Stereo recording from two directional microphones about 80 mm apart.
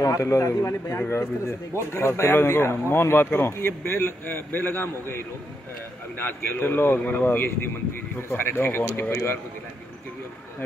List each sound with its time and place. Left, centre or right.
0.0 s a man's voice: left